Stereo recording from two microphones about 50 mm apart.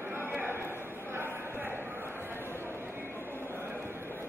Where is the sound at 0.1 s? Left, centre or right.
Right.